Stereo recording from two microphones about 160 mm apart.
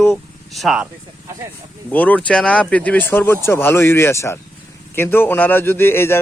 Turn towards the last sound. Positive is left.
turn(degrees=15)  # may be behind; listen again after turning